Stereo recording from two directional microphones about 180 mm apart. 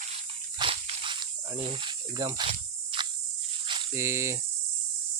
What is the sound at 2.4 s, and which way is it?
Cricket, 30° right (ahead or behind).